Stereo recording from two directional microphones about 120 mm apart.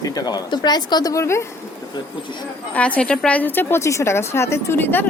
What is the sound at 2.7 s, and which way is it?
A woman's voice, 10° left (ahead or behind).